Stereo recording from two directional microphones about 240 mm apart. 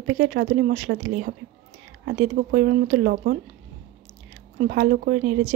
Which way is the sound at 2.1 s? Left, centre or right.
Right.